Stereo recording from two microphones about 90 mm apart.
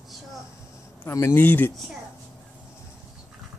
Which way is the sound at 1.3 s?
20° left (ahead or behind).